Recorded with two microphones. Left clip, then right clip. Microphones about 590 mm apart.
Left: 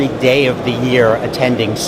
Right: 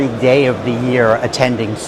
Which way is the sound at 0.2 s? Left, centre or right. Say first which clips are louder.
Right 1 dB; right.